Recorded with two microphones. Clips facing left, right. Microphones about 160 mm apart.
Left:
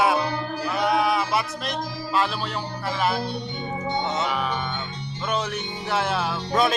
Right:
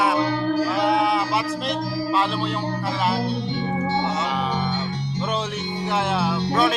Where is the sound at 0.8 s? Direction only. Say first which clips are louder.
Left 1 dB; 25° right (ahead or behind).